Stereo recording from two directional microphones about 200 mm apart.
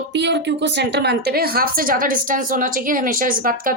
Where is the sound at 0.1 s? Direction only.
60° right (ahead or behind).